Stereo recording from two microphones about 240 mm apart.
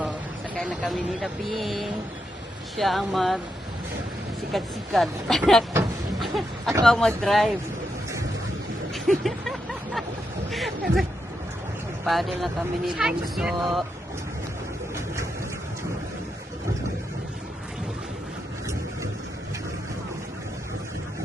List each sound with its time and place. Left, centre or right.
0.6 s speech: centre
4.5 s speech: centre
5.7 s vehicle: centre
6.8 s speech: centre
8.9 s a sound: centre
12.0 s speech: centre
14.9 s a sound: centre